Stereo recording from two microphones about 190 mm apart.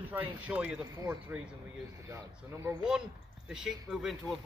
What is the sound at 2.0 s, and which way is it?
Speech, 15° right (ahead or behind).